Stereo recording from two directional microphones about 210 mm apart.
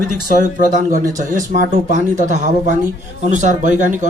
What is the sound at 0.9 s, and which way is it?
Speech, 40° right (ahead or behind).